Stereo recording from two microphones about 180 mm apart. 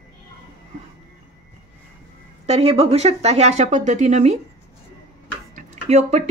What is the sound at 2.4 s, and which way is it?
Speech, 35° right (ahead or behind).